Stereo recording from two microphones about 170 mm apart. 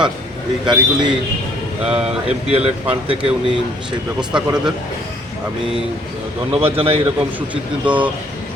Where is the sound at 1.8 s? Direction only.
5° right (ahead or behind).